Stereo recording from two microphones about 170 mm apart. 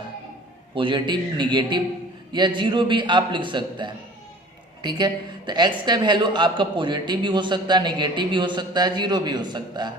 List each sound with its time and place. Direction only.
0.8 s a woman's voice: 30° right (ahead or behind)